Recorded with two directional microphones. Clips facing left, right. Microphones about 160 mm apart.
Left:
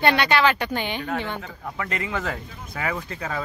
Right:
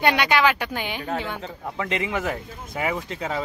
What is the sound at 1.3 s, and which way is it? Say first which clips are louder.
A man's voice: right 2 dB; 25° right (ahead or behind).